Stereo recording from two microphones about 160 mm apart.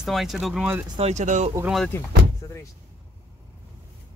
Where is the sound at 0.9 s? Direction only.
45° right (ahead or behind).